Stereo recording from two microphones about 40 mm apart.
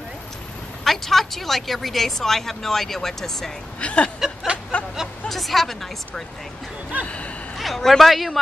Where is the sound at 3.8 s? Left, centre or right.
Left.